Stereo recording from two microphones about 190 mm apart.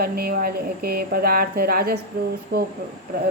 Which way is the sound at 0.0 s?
55° right (ahead or behind).